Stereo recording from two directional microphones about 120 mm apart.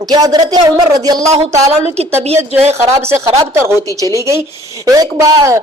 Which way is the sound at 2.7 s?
20° right (ahead or behind).